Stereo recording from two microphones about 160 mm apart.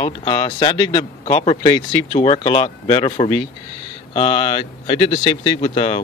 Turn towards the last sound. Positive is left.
turn(degrees=35)  # may be behind; listen again after turning